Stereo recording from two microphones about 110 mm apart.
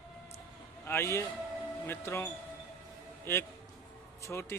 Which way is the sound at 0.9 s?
25° left (ahead or behind).